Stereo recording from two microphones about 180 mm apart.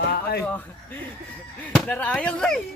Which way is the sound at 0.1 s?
60° left (ahead or behind).